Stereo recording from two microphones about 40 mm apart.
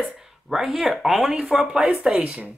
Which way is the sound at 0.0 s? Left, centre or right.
Centre.